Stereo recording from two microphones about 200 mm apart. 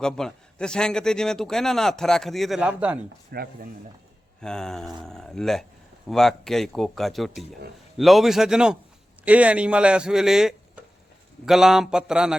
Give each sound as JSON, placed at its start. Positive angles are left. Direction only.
{"t": 0.0, "sound": "a man's voice", "side_deg": 5}
{"t": 3.3, "sound": "speech", "side_deg": -50}
{"t": 4.4, "sound": "a man's voice", "side_deg": 5}